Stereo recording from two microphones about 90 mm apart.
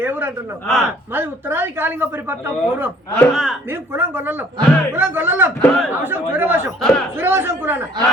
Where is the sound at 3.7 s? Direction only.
25° right (ahead or behind).